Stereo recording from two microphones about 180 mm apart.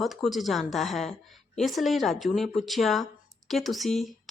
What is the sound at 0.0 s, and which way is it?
A woman's voice, centre (ahead or behind).